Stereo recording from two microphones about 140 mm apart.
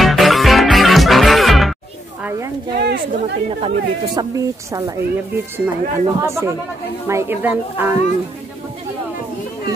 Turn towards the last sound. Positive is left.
turn(degrees=-15)  # may be behind; listen again after turning